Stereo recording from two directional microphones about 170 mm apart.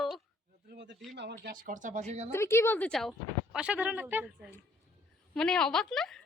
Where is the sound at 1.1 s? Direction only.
80° right; by 2.3 s 40° right (ahead or behind).